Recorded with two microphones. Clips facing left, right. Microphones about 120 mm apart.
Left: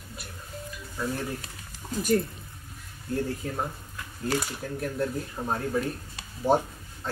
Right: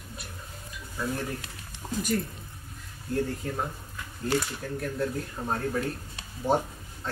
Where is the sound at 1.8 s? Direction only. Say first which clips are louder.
Even; 30° right (ahead or behind).